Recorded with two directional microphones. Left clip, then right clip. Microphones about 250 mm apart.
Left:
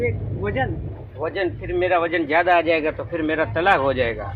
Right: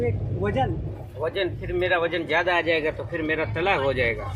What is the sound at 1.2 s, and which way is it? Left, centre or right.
Speech, centre.